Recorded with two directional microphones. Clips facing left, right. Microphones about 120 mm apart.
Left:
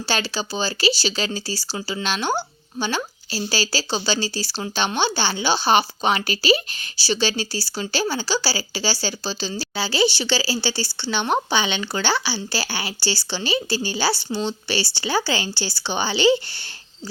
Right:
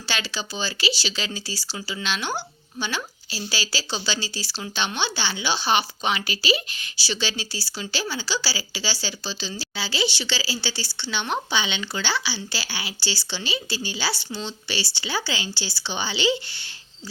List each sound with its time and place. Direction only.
0.0 s speech: 35° left (ahead or behind)